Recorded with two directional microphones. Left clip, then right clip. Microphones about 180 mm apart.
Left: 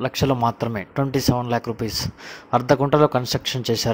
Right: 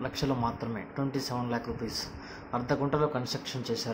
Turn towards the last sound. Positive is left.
turn(degrees=55)  # may be behind; listen again after turning